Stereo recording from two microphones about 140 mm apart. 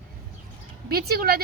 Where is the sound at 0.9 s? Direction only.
90° right.